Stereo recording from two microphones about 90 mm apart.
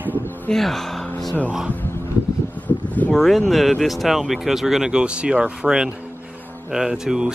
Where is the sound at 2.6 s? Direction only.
15° left (ahead or behind).